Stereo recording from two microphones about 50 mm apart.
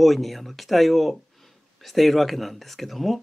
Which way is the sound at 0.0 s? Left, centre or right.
Centre.